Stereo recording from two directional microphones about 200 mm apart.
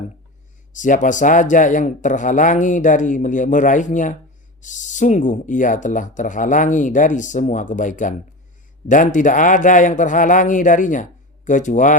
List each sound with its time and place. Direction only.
0.7 s speech: 40° left (ahead or behind)